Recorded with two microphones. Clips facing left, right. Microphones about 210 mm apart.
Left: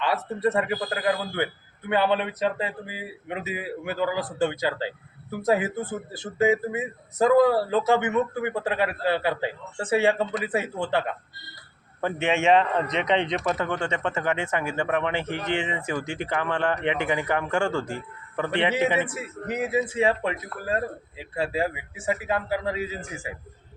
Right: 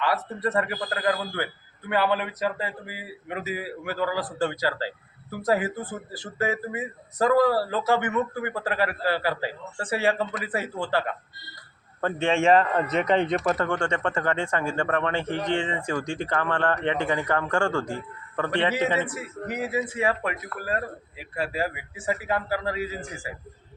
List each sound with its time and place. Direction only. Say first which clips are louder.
0.0 s speech: left 2 dB; 25° left (ahead or behind)
11.9 s speech: right 1 dB; 5° left (ahead or behind)
18.5 s speech: left 1 dB; 25° left (ahead or behind)